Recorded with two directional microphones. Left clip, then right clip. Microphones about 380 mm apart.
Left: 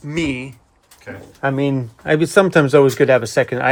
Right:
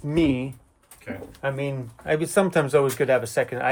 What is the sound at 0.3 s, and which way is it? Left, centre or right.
Speech, centre.